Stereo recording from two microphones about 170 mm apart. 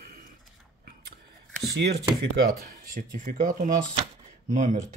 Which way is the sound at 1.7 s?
70° right (ahead or behind).